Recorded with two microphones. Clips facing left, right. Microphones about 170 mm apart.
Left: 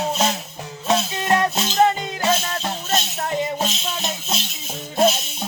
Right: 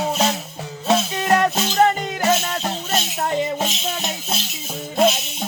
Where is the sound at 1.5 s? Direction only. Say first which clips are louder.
Right 1 dB; 45° right (ahead or behind).